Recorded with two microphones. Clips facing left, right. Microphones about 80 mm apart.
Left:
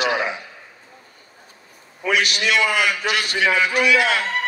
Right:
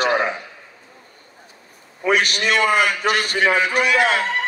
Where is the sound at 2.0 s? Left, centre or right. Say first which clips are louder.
Right 2 dB; right.